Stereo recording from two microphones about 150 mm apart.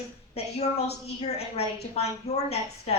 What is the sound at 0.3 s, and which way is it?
Speech, 45° left (ahead or behind).